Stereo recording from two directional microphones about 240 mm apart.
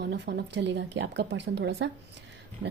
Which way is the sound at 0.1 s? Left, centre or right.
Right.